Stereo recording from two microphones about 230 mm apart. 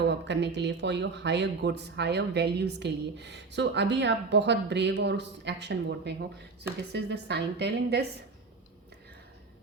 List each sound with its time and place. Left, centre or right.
0.0 s speech: right